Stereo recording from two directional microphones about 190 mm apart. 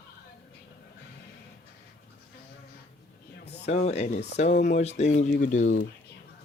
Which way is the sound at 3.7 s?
35° left (ahead or behind).